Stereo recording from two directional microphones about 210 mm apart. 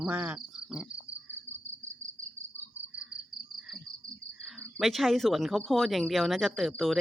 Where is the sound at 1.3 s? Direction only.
65° right (ahead or behind).